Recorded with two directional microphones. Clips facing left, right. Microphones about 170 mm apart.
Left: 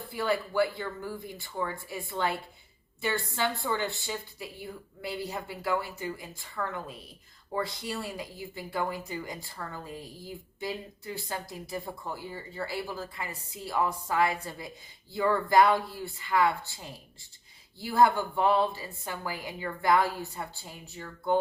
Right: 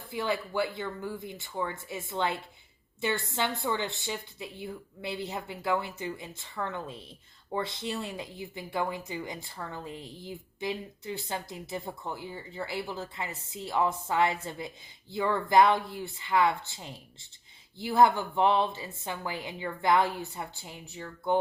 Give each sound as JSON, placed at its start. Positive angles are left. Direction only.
{"t": 0.1, "sound": "speech", "side_deg": -20}
{"t": 15.4, "sound": "speech", "side_deg": -20}